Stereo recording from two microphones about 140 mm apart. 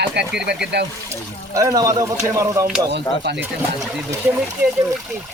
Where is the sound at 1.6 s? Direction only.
25° right (ahead or behind).